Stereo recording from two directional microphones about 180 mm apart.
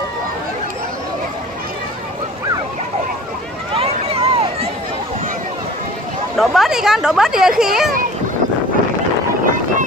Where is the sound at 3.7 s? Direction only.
35° right (ahead or behind).